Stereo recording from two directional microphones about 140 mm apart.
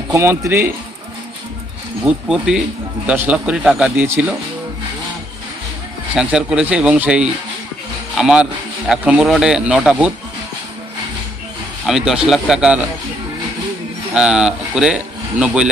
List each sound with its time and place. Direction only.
0.1 s a man's voice: 20° right (ahead or behind)
2.0 s a man's voice: 5° right (ahead or behind)
6.1 s a man's voice: 5° right (ahead or behind)
11.9 s a man's voice: 5° right (ahead or behind)
14.1 s speech: 5° right (ahead or behind)